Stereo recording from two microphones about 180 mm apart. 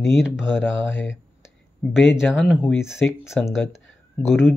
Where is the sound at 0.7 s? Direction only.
90° left.